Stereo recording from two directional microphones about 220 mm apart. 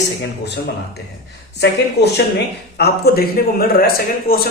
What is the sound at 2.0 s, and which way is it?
A man's voice, 50° left (ahead or behind).